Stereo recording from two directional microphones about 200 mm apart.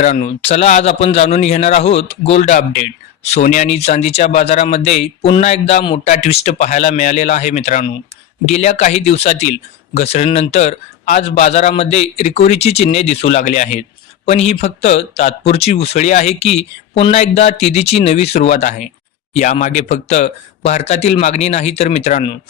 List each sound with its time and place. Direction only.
0.0 s speech: 35° left (ahead or behind)